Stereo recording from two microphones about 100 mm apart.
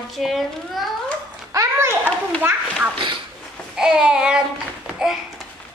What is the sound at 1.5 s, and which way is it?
Children playing, 30° right (ahead or behind).